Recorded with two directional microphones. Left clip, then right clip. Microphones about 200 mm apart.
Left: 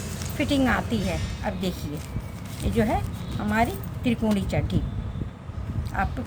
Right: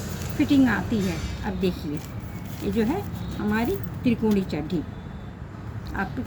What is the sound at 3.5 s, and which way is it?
A woman's voice, 50° left (ahead or behind).